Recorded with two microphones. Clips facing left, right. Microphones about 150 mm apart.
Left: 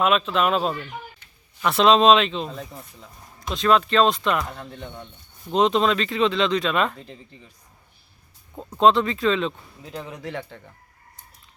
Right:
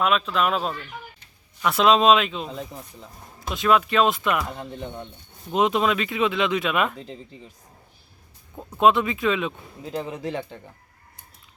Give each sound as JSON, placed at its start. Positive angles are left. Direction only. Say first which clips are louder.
{"t": 0.0, "sound": "speech", "louder": "left 2 dB", "side_deg": 0}
{"t": 4.6, "sound": "speech", "louder": "right 3 dB", "side_deg": -25}
{"t": 5.5, "sound": "speech", "louder": "left 2 dB", "side_deg": -5}
{"t": 8.8, "sound": "speech", "louder": "left 1 dB", "side_deg": -5}
{"t": 9.8, "sound": "speech", "louder": "right 5 dB", "side_deg": -25}